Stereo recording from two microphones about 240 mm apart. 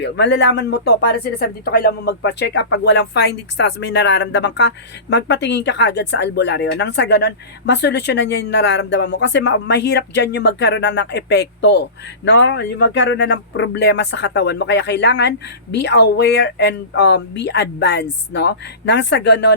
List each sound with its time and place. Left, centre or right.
0.0 s speech: left